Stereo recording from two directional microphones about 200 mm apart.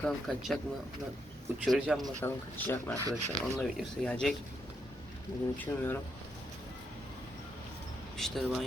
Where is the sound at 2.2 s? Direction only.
10° left (ahead or behind).